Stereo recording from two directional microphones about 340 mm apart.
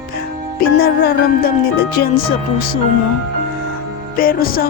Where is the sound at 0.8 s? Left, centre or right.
Left.